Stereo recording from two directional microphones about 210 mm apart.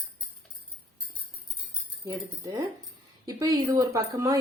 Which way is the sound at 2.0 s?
15° right (ahead or behind).